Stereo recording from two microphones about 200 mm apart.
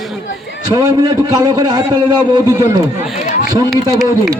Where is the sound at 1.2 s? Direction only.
20° right (ahead or behind).